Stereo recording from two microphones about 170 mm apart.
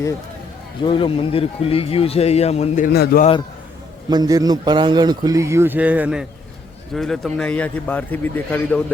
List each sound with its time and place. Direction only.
0.9 s a man's voice: 30° left (ahead or behind)
2.8 s speech: 65° left (ahead or behind)
4.1 s a man's voice: 20° right (ahead or behind); by 8.8 s 10° left (ahead or behind)